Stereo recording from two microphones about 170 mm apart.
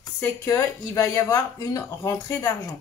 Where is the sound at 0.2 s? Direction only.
15° left (ahead or behind).